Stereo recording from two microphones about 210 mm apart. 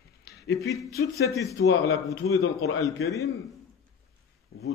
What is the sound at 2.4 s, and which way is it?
Speech, 85° left.